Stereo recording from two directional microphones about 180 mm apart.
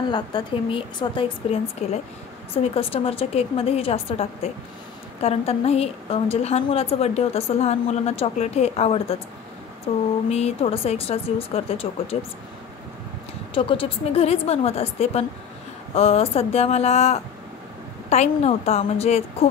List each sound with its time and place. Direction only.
0.1 s a woman's voice: 25° left (ahead or behind)
10.3 s a woman's voice: 35° left (ahead or behind)
13.6 s a woman's voice: 30° left (ahead or behind)